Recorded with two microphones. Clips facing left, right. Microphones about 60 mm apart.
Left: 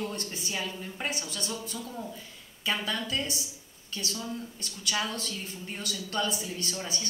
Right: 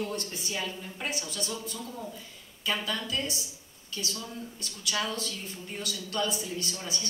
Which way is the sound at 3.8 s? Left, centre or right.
Left.